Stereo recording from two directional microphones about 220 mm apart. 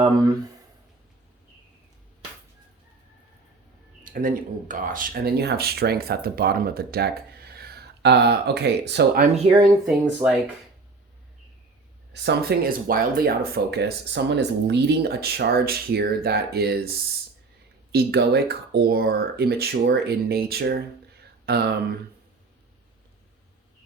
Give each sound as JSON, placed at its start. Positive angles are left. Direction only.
{"t": 4.0, "sound": "speech", "side_deg": -40}
{"t": 9.3, "sound": "speech", "side_deg": -20}
{"t": 9.8, "sound": "speech", "side_deg": -5}
{"t": 12.1, "sound": "speech", "side_deg": -50}
{"t": 21.4, "sound": "a sound", "side_deg": -45}